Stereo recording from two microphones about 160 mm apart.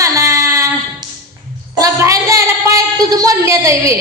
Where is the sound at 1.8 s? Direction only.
20° right (ahead or behind).